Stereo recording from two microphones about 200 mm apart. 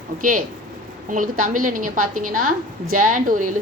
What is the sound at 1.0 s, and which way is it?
A woman's voice, 40° right (ahead or behind).